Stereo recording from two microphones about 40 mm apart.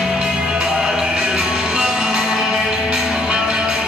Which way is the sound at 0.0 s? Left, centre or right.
Centre.